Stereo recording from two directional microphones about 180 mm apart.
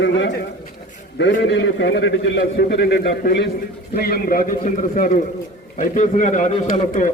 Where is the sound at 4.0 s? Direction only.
55° left (ahead or behind).